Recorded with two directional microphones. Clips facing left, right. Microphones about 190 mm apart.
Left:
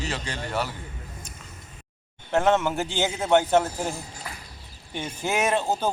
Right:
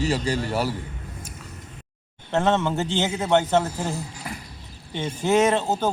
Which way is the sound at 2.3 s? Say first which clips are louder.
Even; 10° left (ahead or behind).